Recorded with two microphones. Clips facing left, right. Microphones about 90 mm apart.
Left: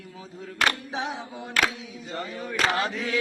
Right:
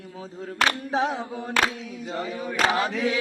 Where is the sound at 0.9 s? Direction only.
40° right (ahead or behind).